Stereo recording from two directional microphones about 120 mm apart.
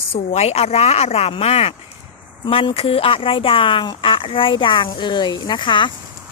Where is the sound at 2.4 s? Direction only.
45° left (ahead or behind).